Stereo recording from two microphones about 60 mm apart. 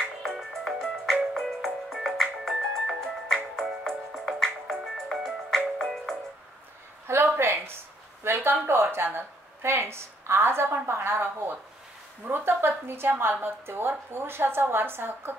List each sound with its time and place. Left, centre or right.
0.2 s music: centre
7.1 s a sound: right
8.2 s a woman's voice: right